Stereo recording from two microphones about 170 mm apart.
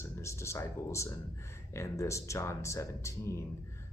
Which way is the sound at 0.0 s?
15° left (ahead or behind).